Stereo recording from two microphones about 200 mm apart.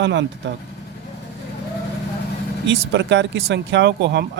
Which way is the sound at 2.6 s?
65° right (ahead or behind).